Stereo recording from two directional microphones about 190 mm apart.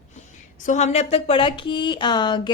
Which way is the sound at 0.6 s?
40° left (ahead or behind).